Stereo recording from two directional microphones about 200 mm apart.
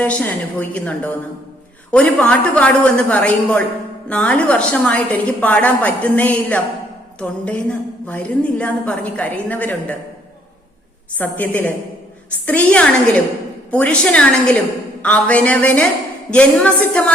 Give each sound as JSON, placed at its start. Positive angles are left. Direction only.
{"t": 0.0, "sound": "a woman's voice", "side_deg": 5}
{"t": 11.2, "sound": "a woman's voice", "side_deg": 10}